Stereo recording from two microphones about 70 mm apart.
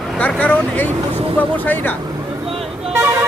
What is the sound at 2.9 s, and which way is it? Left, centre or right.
Vehicle, right.